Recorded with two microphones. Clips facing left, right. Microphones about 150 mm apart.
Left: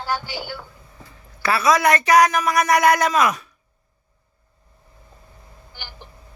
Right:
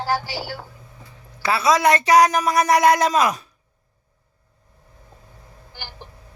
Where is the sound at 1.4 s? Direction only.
25° right (ahead or behind).